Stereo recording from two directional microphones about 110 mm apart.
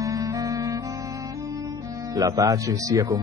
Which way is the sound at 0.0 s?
30° right (ahead or behind).